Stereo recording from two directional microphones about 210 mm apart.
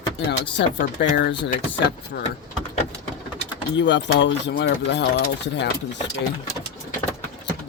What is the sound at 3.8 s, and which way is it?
Speech, 60° left (ahead or behind).